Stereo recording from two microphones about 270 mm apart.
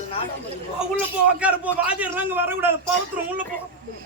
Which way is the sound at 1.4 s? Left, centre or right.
Centre.